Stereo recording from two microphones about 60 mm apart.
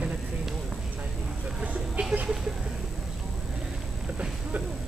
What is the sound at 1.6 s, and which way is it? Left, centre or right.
Vehicle, right.